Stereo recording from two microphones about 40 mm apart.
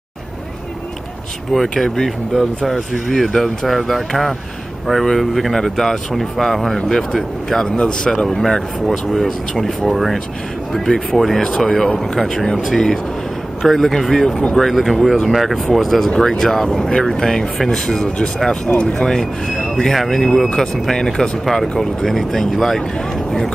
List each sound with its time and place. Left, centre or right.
1.5 s speech: centre
6.8 s speech: centre
7.6 s speech: centre